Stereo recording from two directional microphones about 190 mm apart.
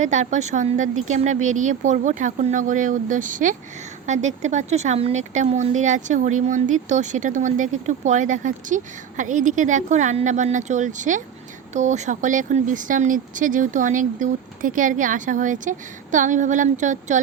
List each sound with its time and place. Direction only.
0.0 s speech: 40° right (ahead or behind)